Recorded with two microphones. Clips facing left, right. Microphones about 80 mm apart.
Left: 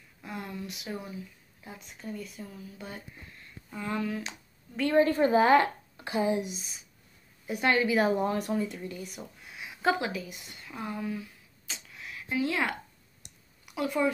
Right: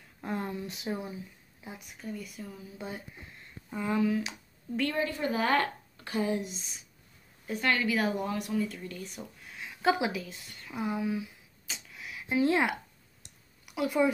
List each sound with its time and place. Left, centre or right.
0.2 s a sound: right
0.5 s speech: right
2.0 s speech: centre
2.8 s speech: centre
4.9 s a woman's voice: left
5.5 s speech: centre
7.4 s a woman's voice: centre; by 8.5 s left
8.5 s a woman's voice: left
8.9 s a sound: centre
10.2 s a woman's voice: centre
10.7 s a sound: centre
12.4 s a woman's voice: right
13.7 s speech: centre